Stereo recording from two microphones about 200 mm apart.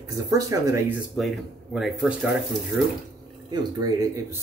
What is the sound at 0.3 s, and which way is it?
Speech, 15° right (ahead or behind).